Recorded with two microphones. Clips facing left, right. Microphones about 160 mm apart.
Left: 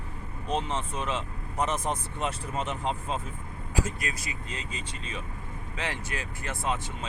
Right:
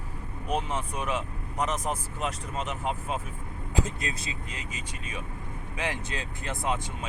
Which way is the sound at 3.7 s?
20° right (ahead or behind).